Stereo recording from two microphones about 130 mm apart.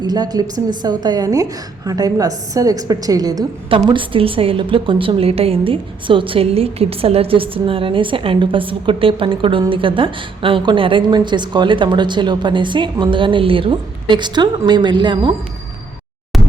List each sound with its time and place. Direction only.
0.0 s a woman's voice: 30° right (ahead or behind)
16.3 s music: centre (ahead or behind)